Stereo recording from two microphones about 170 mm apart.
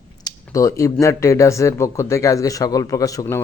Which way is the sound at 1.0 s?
15° left (ahead or behind).